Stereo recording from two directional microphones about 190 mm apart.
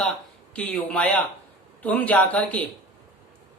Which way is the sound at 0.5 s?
5° left (ahead or behind).